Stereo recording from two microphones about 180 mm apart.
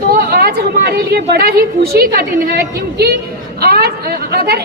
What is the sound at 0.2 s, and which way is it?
A woman's voice, 60° right (ahead or behind).